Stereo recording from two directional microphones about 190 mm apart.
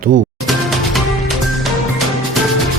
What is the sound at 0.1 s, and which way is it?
Speech, 45° right (ahead or behind).